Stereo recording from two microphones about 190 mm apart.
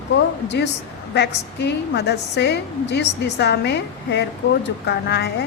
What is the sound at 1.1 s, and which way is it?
A woman's voice, 65° left (ahead or behind).